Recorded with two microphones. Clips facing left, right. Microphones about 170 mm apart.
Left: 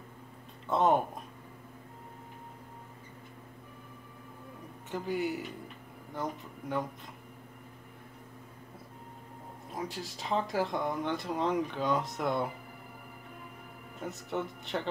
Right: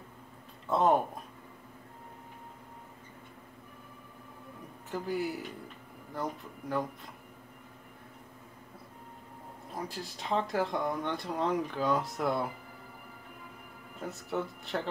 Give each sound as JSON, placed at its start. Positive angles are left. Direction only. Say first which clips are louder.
{"t": 0.7, "sound": "speech", "louder": "even", "side_deg": 0}
{"t": 4.9, "sound": "speech", "louder": "left 1 dB", "side_deg": 0}
{"t": 9.7, "sound": "speech", "louder": "left 1 dB", "side_deg": 0}
{"t": 14.0, "sound": "speech", "louder": "even", "side_deg": 0}